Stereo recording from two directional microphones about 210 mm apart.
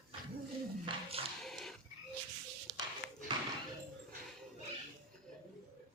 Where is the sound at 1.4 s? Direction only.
Centre (ahead or behind).